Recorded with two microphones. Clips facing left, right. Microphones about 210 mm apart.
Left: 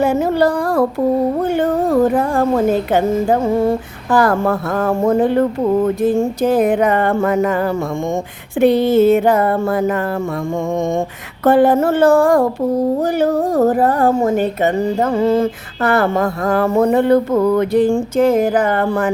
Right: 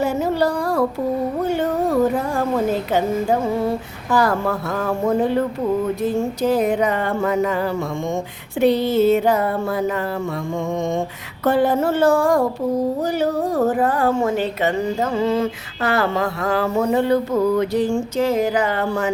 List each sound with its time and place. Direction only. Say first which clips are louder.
0.0 s a sound: left 5 dB; 55° left (ahead or behind)
1.5 s speech: left 4 dB; 55° left (ahead or behind)
4.1 s speech: left 4 dB; 50° left (ahead or behind)